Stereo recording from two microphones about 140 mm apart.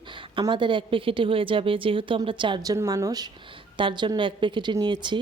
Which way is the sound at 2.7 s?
20° right (ahead or behind).